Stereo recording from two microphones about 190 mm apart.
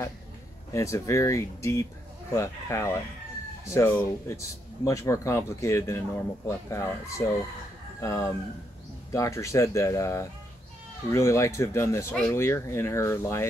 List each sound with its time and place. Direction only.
0.7 s speech: 15° left (ahead or behind)